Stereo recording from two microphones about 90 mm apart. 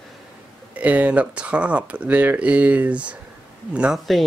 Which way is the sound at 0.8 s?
15° right (ahead or behind).